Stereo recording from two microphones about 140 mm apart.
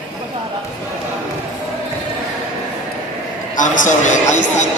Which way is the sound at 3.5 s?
65° left (ahead or behind).